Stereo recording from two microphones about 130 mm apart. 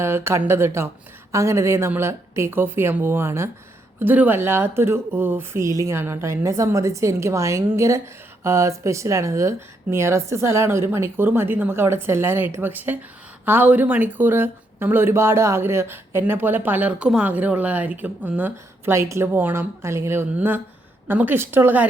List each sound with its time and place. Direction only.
0.0 s speech: 20° right (ahead or behind)